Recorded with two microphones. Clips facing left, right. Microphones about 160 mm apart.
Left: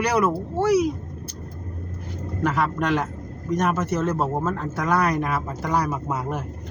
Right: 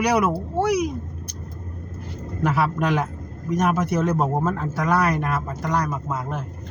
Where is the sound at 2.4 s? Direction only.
5° right (ahead or behind).